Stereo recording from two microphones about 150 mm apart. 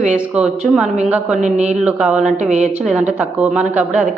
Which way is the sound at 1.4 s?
50° right (ahead or behind).